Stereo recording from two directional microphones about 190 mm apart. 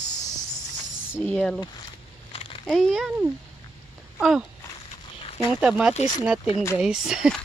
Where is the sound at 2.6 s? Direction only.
Centre (ahead or behind).